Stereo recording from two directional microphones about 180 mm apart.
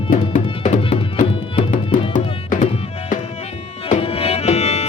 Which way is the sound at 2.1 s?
45° left (ahead or behind).